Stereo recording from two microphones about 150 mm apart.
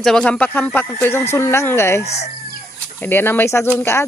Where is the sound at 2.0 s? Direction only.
45° left (ahead or behind).